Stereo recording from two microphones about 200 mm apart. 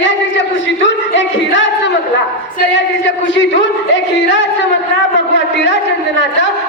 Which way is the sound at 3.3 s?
65° left (ahead or behind).